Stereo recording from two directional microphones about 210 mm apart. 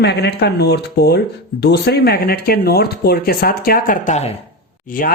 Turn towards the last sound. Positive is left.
turn(degrees=40)  # may be behind; listen again after turning